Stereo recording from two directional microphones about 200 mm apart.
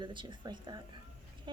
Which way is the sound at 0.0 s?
25° right (ahead or behind).